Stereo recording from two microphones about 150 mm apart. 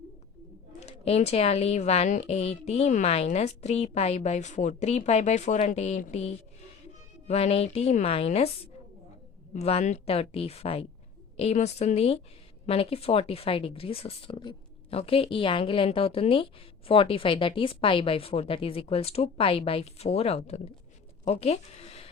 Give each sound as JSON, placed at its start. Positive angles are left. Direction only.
{"t": 0.8, "sound": "speech", "side_deg": 45}
{"t": 9.5, "sound": "speech", "side_deg": 45}